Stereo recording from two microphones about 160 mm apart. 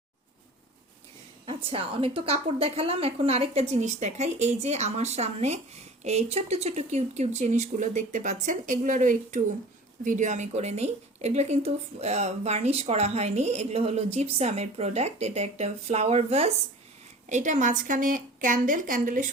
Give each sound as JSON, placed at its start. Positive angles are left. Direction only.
{"t": 1.5, "sound": "a woman's voice", "side_deg": -35}